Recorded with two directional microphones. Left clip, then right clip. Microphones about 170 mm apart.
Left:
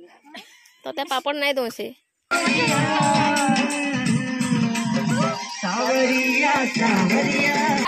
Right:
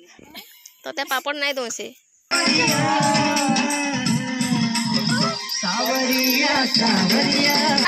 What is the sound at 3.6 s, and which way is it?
Music, 55° left (ahead or behind).